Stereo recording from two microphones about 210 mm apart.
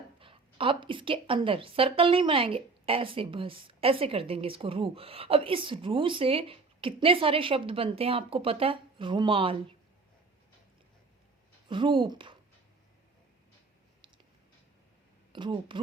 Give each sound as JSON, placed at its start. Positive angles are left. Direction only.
{"t": 0.2, "sound": "a woman's voice", "side_deg": -25}
{"t": 11.7, "sound": "a woman's voice", "side_deg": -25}
{"t": 15.3, "sound": "speech", "side_deg": -25}